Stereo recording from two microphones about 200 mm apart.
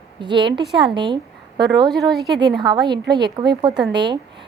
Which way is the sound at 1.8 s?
Centre (ahead or behind).